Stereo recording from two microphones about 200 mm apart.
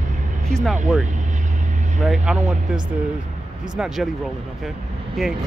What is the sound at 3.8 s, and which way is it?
Speech, 5° right (ahead or behind).